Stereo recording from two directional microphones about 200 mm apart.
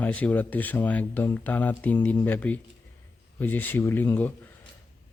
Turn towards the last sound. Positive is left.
turn(degrees=10)  # may be behind; listen again after turning